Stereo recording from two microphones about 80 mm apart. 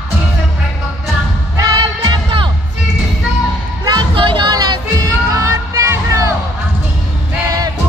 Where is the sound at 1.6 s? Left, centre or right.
Right.